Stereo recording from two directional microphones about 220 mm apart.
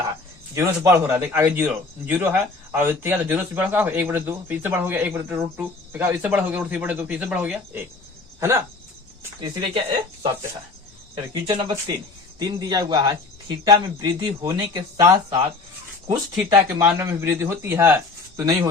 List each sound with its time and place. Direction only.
0.5 s a man's voice: 10° right (ahead or behind)
11.4 s a man's voice: 20° right (ahead or behind)
16.5 s a man's voice: 15° right (ahead or behind)